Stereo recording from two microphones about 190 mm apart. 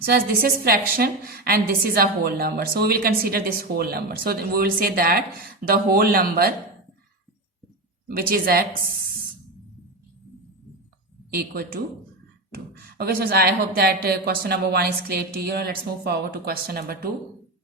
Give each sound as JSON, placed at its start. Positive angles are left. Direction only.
{"t": 0.0, "sound": "a woman's voice", "side_deg": -55}
{"t": 8.0, "sound": "a woman's voice", "side_deg": -50}
{"t": 11.3, "sound": "speech", "side_deg": -55}
{"t": 13.0, "sound": "speech", "side_deg": -55}